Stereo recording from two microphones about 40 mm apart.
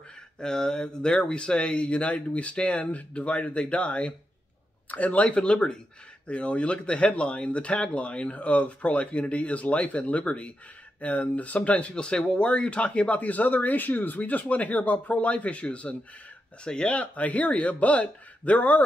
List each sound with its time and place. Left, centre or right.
0.4 s speech: centre; by 11.9 s left
11.9 s speech: left